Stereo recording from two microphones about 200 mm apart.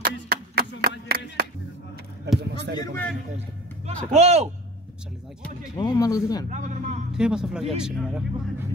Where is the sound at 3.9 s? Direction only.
35° right (ahead or behind).